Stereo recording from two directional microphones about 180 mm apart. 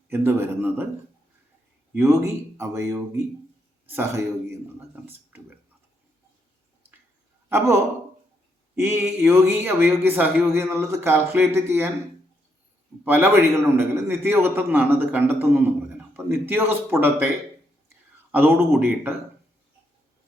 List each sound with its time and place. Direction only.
0.1 s speech: 10° right (ahead or behind)
1.9 s speech: 15° right (ahead or behind)
7.5 s speech: 15° right (ahead or behind)
13.1 s speech: 10° right (ahead or behind)
18.3 s a man's voice: 10° right (ahead or behind)